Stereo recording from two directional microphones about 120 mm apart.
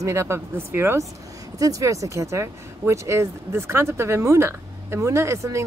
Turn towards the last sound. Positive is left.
turn(degrees=-25)  # may be behind; listen again after turning